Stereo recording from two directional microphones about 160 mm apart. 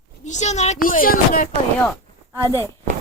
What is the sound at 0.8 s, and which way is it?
Speech, 60° left (ahead or behind).